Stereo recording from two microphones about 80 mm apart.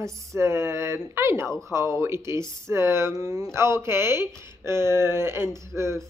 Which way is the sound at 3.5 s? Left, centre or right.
Right.